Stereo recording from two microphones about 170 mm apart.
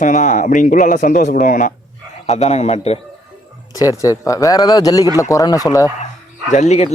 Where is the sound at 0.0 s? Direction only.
50° left (ahead or behind).